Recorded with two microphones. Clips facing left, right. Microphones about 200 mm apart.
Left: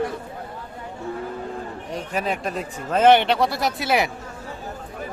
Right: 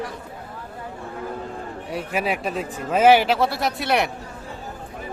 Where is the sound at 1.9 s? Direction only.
10° right (ahead or behind).